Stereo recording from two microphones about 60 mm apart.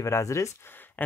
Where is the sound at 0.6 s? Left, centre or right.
Left.